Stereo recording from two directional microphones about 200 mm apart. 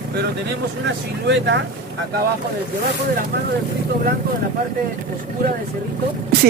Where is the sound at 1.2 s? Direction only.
60° right (ahead or behind).